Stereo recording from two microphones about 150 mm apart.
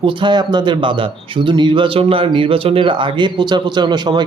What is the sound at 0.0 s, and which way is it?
A man's voice, 35° right (ahead or behind).